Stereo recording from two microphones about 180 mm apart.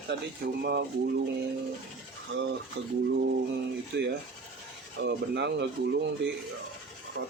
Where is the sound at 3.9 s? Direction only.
70° right (ahead or behind).